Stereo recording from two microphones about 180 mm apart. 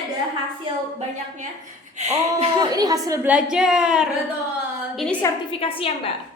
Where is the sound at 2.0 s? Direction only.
35° right (ahead or behind).